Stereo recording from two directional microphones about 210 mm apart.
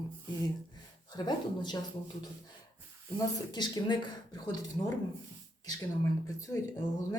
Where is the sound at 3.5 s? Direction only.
20° left (ahead or behind).